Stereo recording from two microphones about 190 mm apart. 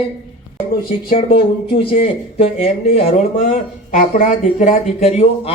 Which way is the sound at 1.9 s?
30° left (ahead or behind).